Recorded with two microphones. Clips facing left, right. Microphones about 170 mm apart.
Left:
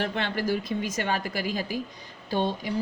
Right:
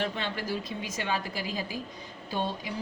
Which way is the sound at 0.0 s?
65° left (ahead or behind).